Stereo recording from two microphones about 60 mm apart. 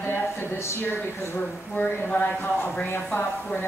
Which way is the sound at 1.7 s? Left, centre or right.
Left.